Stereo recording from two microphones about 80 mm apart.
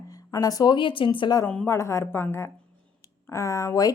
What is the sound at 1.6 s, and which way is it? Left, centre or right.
A woman's voice, left.